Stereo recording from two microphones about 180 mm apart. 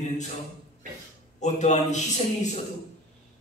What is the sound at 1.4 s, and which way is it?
A man's voice, 40° left (ahead or behind).